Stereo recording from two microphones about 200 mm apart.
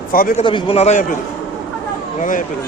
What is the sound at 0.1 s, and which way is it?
Speech, 45° left (ahead or behind).